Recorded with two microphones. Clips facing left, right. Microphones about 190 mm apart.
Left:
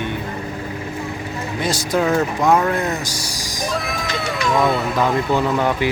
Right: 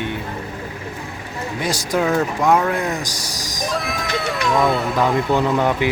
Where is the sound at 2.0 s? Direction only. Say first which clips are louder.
Even; 10° left (ahead or behind).